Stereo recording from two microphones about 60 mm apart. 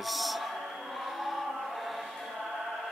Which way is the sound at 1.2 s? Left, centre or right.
Centre.